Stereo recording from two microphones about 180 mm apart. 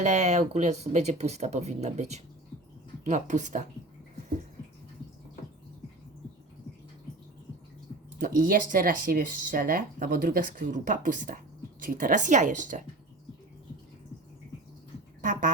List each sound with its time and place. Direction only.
0.0 s speech: 40° right (ahead or behind)
8.2 s speech: 50° right (ahead or behind)
15.2 s speech: 50° right (ahead or behind)